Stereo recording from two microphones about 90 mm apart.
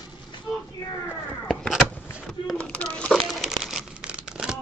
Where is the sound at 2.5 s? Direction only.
10° left (ahead or behind).